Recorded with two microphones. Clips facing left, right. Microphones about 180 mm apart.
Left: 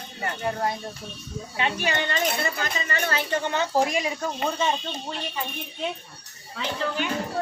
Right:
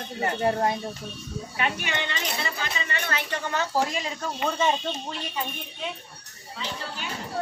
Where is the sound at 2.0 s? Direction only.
50° left (ahead or behind).